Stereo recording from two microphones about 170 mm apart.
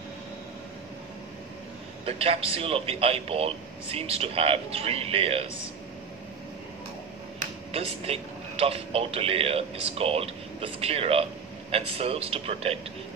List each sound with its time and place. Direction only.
2.0 s speech: 35° right (ahead or behind)
7.7 s speech: 35° right (ahead or behind)